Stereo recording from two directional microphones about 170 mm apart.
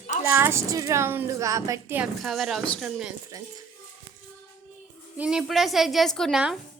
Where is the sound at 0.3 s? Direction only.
15° right (ahead or behind).